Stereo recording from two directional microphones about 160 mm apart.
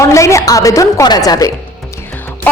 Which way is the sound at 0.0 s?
20° left (ahead or behind).